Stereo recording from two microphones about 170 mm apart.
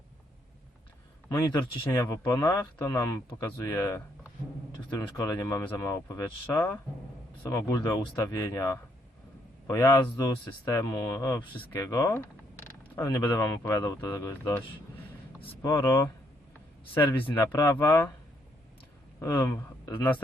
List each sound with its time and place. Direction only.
1.8 s speech: 15° left (ahead or behind)
15.6 s speech: 15° left (ahead or behind)
19.2 s speech: 15° left (ahead or behind)